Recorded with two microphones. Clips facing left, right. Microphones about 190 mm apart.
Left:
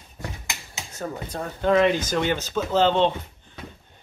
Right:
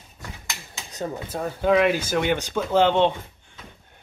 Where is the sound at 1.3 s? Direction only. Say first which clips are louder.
Right 1 dB; 5° right (ahead or behind).